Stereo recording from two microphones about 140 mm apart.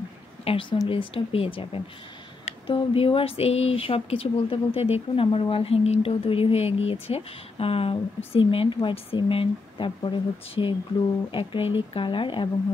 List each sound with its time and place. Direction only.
0.5 s speech: 40° left (ahead or behind)